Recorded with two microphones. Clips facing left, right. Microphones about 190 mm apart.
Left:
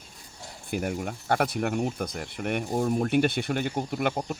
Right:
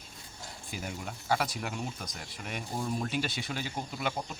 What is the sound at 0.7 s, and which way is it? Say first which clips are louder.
Speech: left 10 dB; 60° left (ahead or behind).